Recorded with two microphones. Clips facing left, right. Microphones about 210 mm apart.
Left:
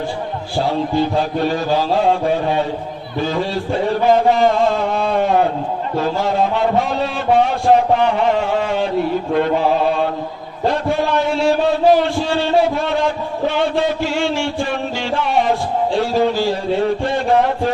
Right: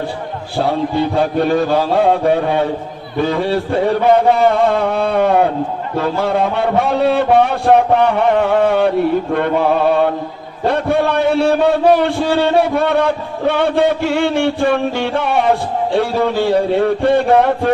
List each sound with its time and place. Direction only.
0.6 s a man's voice: 55° right (ahead or behind)